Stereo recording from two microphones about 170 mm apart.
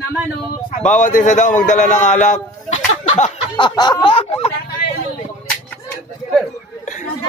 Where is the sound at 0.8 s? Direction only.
45° left (ahead or behind).